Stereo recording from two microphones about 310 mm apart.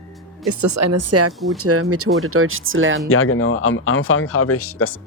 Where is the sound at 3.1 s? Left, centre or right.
Left.